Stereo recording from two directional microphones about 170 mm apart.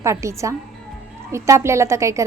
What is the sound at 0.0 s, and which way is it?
A woman's voice, 15° right (ahead or behind).